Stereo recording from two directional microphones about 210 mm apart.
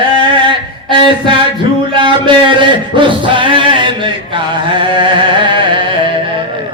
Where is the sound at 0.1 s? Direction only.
25° right (ahead or behind).